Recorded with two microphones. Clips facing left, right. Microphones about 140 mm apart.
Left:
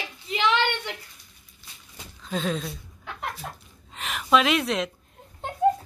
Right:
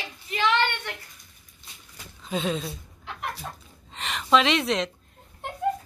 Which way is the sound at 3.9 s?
Centre (ahead or behind).